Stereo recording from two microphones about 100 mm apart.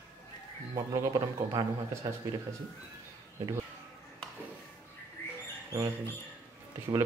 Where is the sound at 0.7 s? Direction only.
35° right (ahead or behind).